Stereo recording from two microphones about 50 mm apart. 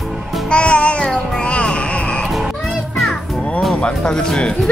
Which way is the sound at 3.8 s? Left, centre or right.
Centre.